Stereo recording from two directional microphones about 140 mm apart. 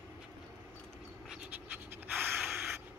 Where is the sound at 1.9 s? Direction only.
10° right (ahead or behind).